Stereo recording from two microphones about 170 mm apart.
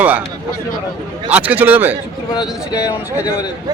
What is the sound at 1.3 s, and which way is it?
Speech, 10° right (ahead or behind).